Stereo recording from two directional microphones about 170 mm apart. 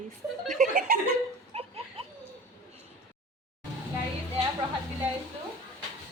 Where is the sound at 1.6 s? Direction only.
35° right (ahead or behind).